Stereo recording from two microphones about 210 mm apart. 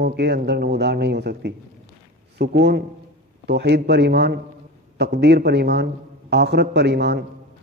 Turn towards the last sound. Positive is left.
turn(degrees=-50)  # may be behind; listen again after turning